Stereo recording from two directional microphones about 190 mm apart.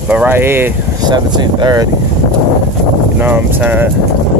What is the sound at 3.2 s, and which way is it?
Speech, 10° right (ahead or behind).